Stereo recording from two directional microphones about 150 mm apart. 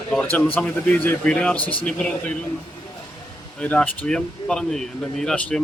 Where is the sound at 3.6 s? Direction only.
10° left (ahead or behind).